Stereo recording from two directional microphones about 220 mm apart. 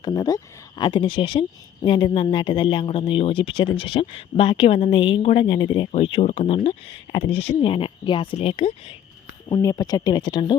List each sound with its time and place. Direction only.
0.0 s speech: 15° left (ahead or behind)